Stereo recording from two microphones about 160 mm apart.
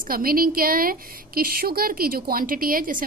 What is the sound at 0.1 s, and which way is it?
A woman's voice, 65° right (ahead or behind).